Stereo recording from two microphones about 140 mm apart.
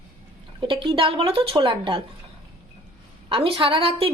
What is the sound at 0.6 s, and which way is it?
A woman's voice, 35° right (ahead or behind).